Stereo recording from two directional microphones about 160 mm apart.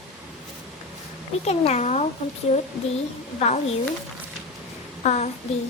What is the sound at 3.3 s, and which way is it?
Speech, 45° left (ahead or behind).